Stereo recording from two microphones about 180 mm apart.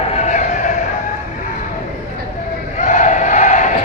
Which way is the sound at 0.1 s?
40° left (ahead or behind).